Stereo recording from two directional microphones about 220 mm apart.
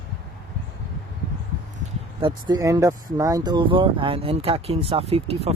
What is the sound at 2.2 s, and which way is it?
Speech, 15° right (ahead or behind).